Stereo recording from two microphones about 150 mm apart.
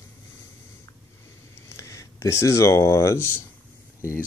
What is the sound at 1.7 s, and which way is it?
Speech, 20° left (ahead or behind).